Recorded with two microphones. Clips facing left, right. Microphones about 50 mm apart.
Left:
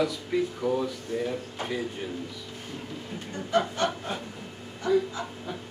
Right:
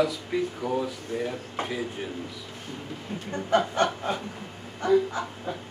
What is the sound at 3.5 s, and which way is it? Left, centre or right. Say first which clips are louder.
Speech: right 2 dB; right.